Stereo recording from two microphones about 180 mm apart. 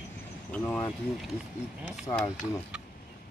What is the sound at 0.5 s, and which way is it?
Speech, 10° left (ahead or behind).